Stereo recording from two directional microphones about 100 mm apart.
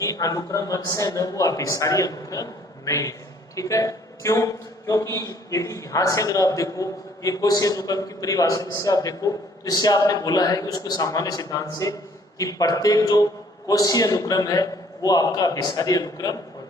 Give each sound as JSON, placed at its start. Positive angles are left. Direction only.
{"t": 0.0, "sound": "a man's voice", "side_deg": 35}